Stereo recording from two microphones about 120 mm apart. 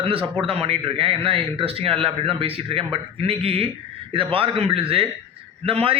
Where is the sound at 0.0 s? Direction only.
50° right (ahead or behind).